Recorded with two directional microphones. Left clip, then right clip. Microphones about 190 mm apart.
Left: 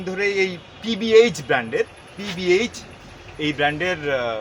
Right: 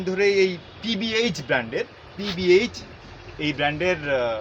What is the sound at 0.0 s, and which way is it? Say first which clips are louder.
Speech: right 2 dB; 20° left (ahead or behind).